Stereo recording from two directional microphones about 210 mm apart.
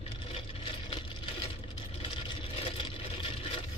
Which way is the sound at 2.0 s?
25° left (ahead or behind).